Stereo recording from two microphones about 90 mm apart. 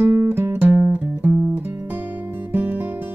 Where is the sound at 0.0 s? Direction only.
20° right (ahead or behind).